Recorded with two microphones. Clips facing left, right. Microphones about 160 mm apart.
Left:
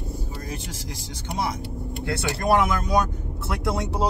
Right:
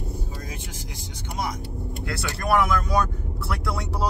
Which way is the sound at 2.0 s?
25° left (ahead or behind).